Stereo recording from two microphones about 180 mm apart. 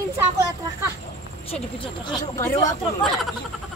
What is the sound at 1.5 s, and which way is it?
Speech, 25° left (ahead or behind).